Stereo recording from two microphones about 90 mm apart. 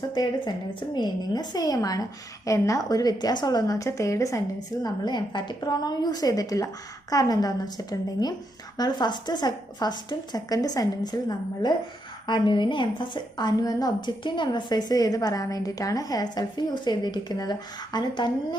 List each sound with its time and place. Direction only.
0.1 s a woman's voice: 55° left (ahead or behind); by 4.4 s 35° left (ahead or behind)
4.8 s a woman's voice: 55° left (ahead or behind)